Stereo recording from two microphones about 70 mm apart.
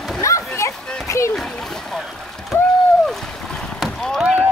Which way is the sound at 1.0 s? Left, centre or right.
Left.